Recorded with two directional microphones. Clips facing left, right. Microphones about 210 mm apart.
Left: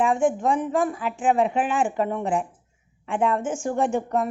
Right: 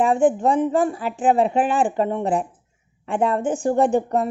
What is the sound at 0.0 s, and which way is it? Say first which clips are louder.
A woman's voice: right 4 dB; 35° right (ahead or behind).